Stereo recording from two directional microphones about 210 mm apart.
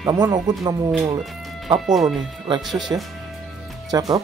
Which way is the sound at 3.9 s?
15° right (ahead or behind).